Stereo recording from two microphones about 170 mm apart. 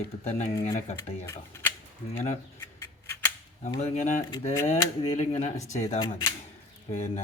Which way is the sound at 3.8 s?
40° left (ahead or behind).